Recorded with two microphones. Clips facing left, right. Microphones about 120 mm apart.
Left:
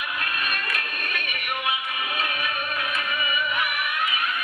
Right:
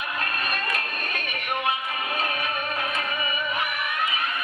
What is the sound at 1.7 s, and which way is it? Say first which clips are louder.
Music: right 1 dB; 30° right (ahead or behind).